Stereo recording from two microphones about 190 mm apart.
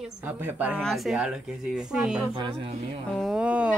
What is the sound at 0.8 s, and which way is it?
Speech, centre (ahead or behind).